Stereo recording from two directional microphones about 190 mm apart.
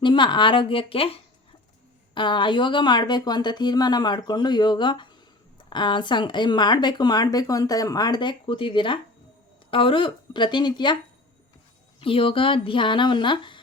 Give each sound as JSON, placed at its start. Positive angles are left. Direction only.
{"t": 0.0, "sound": "speech", "side_deg": 25}
{"t": 11.9, "sound": "speech", "side_deg": 30}